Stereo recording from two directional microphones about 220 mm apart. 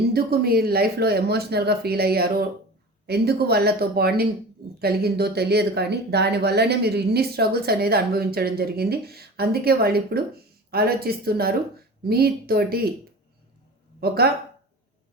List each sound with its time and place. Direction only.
0.1 s speech: 45° right (ahead or behind)
14.0 s speech: 45° right (ahead or behind)